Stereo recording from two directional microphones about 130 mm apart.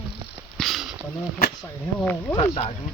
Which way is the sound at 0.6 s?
Centre (ahead or behind).